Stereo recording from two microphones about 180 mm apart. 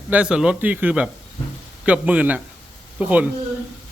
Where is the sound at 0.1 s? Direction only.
5° right (ahead or behind).